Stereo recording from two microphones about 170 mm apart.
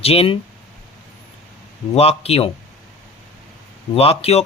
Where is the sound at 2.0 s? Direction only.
35° left (ahead or behind).